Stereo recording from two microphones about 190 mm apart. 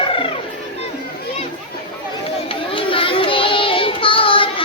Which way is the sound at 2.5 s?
30° left (ahead or behind).